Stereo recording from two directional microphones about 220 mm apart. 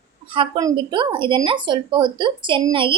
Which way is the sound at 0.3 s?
20° right (ahead or behind).